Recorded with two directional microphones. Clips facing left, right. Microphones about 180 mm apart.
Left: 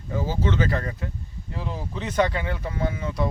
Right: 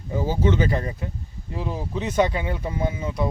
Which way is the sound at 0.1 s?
15° right (ahead or behind).